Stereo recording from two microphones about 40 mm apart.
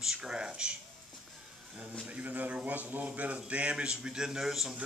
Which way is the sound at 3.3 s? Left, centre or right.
Right.